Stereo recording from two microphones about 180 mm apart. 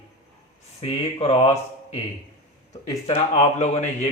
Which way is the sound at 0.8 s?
35° left (ahead or behind).